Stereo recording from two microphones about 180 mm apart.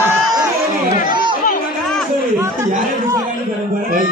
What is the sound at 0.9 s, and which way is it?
Speech, 55° left (ahead or behind).